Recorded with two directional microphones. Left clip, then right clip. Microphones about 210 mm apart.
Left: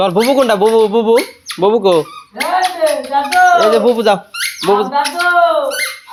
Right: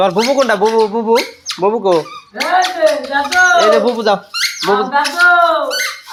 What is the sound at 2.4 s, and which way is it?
Speech, 15° right (ahead or behind).